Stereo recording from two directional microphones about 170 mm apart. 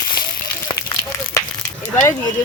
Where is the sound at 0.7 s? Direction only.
25° left (ahead or behind).